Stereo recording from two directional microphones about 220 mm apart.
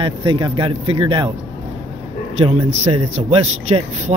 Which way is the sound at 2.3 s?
25° right (ahead or behind).